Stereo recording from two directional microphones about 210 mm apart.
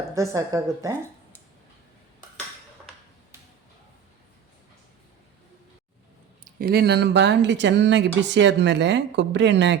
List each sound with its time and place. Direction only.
0.1 s a woman's voice: 15° right (ahead or behind)
6.4 s speech: 45° right (ahead or behind)